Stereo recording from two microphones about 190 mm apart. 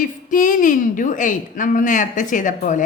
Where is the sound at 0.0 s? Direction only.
45° left (ahead or behind).